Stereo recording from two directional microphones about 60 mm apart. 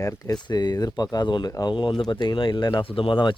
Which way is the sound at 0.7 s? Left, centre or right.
Left.